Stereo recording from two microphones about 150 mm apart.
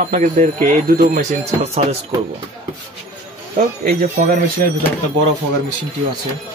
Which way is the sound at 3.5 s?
75° right (ahead or behind).